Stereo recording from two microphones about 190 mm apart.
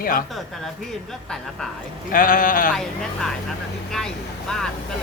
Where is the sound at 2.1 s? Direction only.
45° left (ahead or behind).